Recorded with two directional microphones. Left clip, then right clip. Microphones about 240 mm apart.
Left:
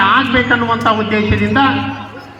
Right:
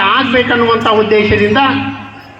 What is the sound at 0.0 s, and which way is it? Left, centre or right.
A man's voice, right.